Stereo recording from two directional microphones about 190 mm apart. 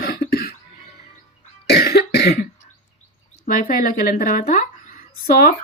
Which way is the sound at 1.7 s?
60° left (ahead or behind).